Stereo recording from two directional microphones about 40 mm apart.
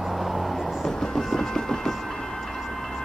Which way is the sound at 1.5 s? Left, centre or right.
Centre.